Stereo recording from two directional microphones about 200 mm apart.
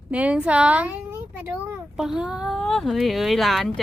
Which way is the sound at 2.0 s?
Centre (ahead or behind).